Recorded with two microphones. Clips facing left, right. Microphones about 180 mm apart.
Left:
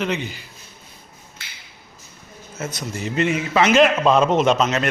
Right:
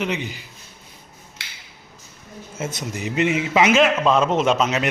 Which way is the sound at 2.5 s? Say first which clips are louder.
Even; 25° right (ahead or behind).